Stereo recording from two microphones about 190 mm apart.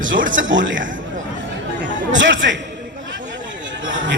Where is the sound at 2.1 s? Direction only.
75° right (ahead or behind).